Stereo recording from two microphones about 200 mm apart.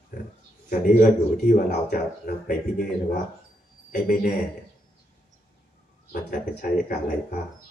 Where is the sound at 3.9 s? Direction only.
45° left (ahead or behind).